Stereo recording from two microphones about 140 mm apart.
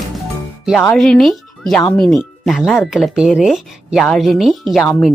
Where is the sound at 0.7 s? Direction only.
5° left (ahead or behind).